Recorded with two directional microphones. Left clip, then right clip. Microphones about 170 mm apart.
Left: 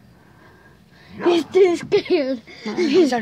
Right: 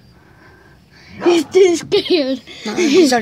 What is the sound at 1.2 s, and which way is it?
Speech, 5° right (ahead or behind).